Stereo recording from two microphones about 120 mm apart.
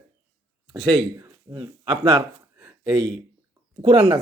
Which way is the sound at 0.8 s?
50° right (ahead or behind).